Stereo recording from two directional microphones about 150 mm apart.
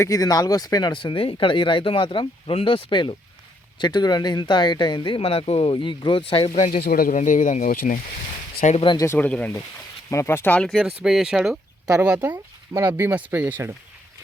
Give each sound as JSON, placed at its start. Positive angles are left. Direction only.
{"t": 0.0, "sound": "speech", "side_deg": 25}
{"t": 6.5, "sound": "speech", "side_deg": 60}
{"t": 6.8, "sound": "speech", "side_deg": 75}
{"t": 7.2, "sound": "speech", "side_deg": 60}
{"t": 8.8, "sound": "speech", "side_deg": 30}
{"t": 9.0, "sound": "speech", "side_deg": 10}